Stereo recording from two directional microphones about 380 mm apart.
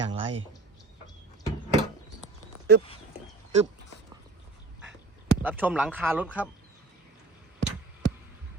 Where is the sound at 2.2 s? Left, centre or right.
Right.